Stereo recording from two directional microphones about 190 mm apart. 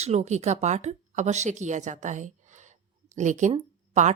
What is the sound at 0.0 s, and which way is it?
A woman's voice, 35° right (ahead or behind).